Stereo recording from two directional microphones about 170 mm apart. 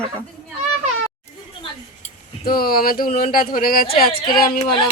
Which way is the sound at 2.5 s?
60° left (ahead or behind).